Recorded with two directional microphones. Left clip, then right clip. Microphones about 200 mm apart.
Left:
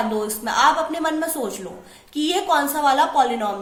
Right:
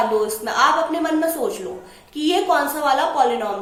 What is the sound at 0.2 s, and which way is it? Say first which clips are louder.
A woman's voice: right 1 dB; 45° left (ahead or behind).